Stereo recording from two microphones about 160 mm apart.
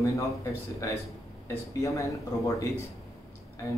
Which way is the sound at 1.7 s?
20° left (ahead or behind).